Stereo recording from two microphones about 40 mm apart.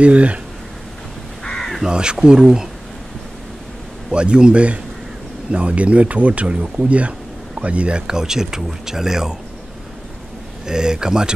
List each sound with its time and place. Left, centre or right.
0.0 s speech: right
1.4 s crow: centre
1.9 s speech: right
4.1 s speech: right
8.1 s speech: centre
10.7 s speech: centre